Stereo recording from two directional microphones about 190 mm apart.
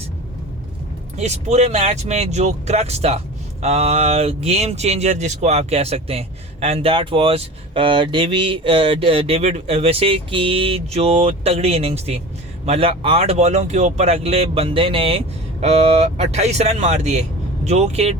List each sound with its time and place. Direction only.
1.1 s speech: 35° right (ahead or behind)